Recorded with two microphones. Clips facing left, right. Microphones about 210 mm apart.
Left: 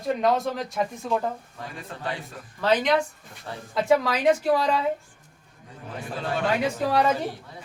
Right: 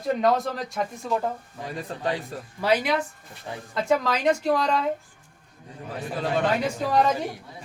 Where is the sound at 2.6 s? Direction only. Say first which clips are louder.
Left 1 dB; 10° right (ahead or behind).